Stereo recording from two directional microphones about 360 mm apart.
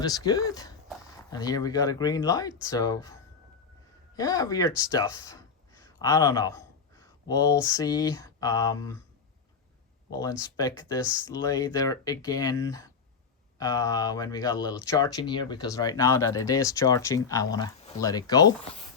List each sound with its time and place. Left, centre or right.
0.0 s speech: centre
10.1 s speech: centre